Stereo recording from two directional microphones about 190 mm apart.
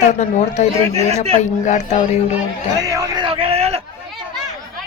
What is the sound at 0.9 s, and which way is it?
Speech, 35° right (ahead or behind).